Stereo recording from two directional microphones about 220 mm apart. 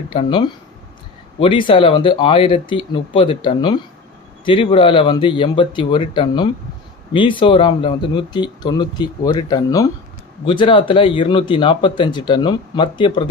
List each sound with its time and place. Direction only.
0.1 s speech: 25° left (ahead or behind)